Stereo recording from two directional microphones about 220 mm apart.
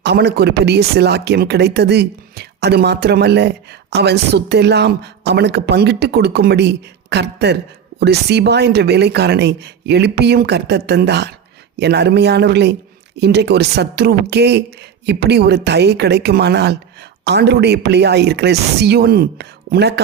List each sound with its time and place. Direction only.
0.0 s speech: 50° right (ahead or behind)